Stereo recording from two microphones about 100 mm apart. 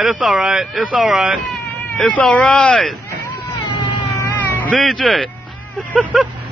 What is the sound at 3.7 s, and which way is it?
Cat, 55° left (ahead or behind).